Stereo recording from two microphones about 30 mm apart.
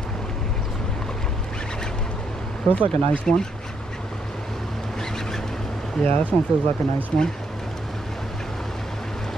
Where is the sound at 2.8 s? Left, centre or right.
Left.